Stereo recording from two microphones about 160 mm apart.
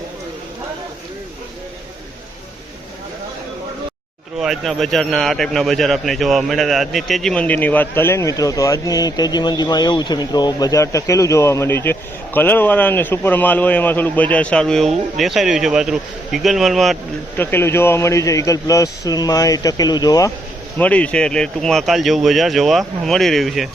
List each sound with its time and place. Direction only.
4.4 s speech: centre (ahead or behind)
17.3 s a man's voice: 15° left (ahead or behind)
20.7 s speech: 10° left (ahead or behind)